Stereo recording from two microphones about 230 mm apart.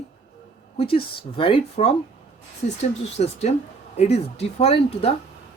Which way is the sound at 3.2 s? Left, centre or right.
Left.